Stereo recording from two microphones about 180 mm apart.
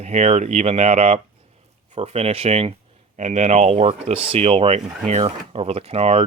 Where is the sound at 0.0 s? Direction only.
40° right (ahead or behind).